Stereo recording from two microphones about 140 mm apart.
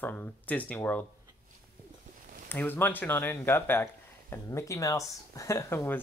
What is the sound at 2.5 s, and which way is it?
Speech, 15° left (ahead or behind).